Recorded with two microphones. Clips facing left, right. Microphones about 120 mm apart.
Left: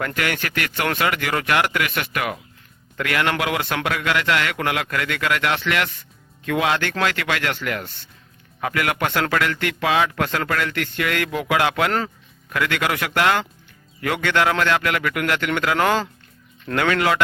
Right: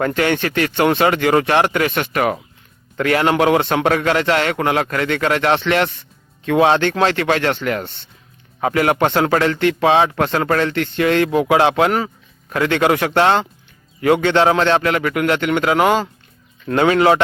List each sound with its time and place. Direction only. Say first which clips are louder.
0.0 s speech: right 7 dB; 30° right (ahead or behind)
11.9 s speech: right 4 dB; 10° right (ahead or behind)
12.5 s speech: right 7 dB; 30° right (ahead or behind)